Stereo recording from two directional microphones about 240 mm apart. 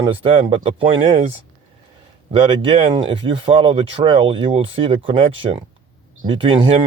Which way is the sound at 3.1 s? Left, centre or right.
Centre.